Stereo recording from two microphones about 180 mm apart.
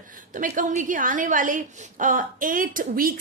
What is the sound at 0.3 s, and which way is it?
A woman's voice, 45° right (ahead or behind).